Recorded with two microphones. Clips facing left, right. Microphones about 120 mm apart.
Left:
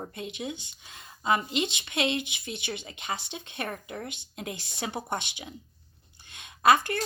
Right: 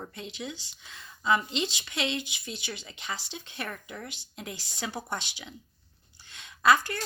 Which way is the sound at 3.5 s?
50° left (ahead or behind).